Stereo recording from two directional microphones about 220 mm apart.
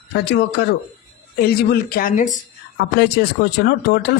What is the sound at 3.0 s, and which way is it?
Speech, 50° left (ahead or behind).